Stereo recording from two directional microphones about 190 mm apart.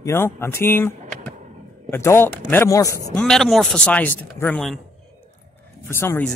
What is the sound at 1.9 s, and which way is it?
Speech, 10° left (ahead or behind).